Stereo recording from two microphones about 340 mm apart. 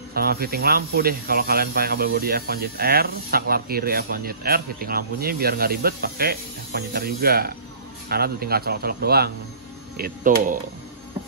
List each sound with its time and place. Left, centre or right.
0.1 s speech: right